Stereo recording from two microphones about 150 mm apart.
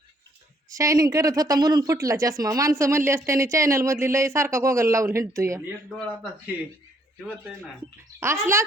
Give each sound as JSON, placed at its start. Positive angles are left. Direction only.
{"t": 0.7, "sound": "speech", "side_deg": -20}
{"t": 7.2, "sound": "speech", "side_deg": 5}
{"t": 8.2, "sound": "speech", "side_deg": -15}